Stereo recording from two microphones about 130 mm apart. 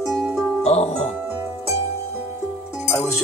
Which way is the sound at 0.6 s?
55° left (ahead or behind).